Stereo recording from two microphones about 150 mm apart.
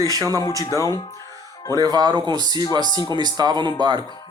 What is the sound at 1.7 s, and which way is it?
Speech, 25° right (ahead or behind).